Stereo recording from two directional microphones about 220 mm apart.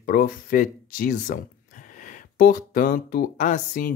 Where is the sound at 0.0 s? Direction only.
40° left (ahead or behind).